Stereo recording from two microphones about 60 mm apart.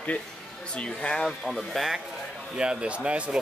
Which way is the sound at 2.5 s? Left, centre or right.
Centre.